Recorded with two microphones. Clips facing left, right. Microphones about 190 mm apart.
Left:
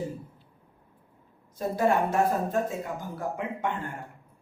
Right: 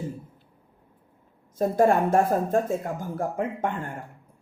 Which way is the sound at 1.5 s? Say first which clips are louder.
Right 4 dB; 50° right (ahead or behind).